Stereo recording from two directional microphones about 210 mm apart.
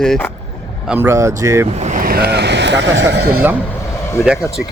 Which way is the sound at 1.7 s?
35° right (ahead or behind).